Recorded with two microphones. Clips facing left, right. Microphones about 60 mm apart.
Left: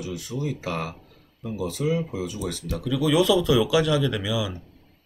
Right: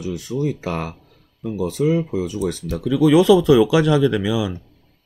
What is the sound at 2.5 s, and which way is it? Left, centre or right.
Speech, right.